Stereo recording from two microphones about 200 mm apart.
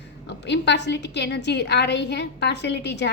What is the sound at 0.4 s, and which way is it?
A woman's voice, 60° left (ahead or behind).